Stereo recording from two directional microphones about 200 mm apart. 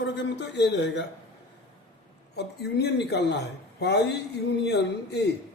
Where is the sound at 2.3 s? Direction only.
55° left (ahead or behind).